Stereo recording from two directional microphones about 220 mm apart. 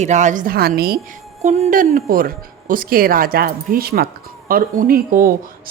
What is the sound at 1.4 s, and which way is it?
A woman's voice, 30° right (ahead or behind).